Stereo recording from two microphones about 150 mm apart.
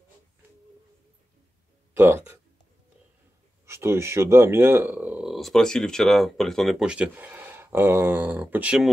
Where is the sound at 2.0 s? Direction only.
15° right (ahead or behind).